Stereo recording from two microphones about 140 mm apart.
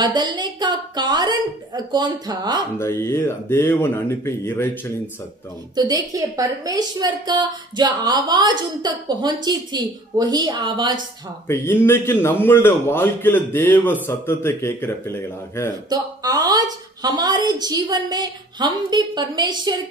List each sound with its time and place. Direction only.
0.0 s a woman's voice: 30° right (ahead or behind)
2.8 s a man's voice: 15° left (ahead or behind)
5.8 s a woman's voice: 30° right (ahead or behind)
11.4 s a man's voice: 20° left (ahead or behind)
15.9 s a woman's voice: 25° right (ahead or behind)